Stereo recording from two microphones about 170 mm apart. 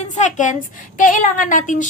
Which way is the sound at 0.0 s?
45° left (ahead or behind).